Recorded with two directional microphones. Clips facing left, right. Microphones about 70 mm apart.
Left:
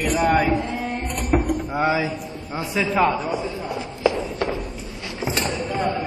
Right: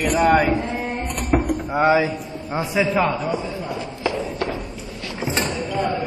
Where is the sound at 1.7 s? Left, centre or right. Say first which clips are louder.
Right 5 dB; right.